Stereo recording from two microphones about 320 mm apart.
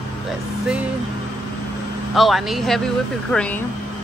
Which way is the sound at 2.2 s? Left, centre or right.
Centre.